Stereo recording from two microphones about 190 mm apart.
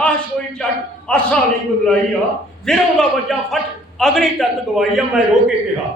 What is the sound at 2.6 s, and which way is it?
A man's voice, centre (ahead or behind).